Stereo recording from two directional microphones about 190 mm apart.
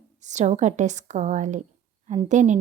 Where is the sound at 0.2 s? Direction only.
40° right (ahead or behind).